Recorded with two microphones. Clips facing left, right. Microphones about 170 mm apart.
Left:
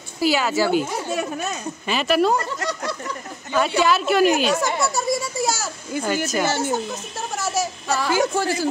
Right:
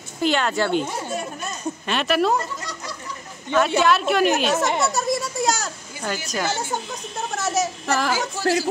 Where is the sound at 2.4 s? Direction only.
70° left (ahead or behind).